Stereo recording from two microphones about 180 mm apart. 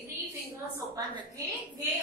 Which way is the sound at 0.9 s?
20° right (ahead or behind).